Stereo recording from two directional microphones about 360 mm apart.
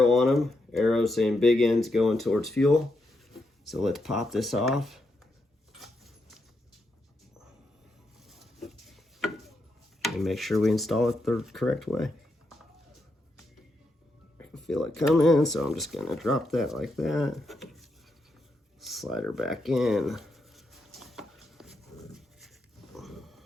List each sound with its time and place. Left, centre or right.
0.0 s speech: centre
8.3 s a sound: centre
10.0 s speech: centre
14.3 s speech: centre
18.8 s writing: centre
23.0 s a sound: centre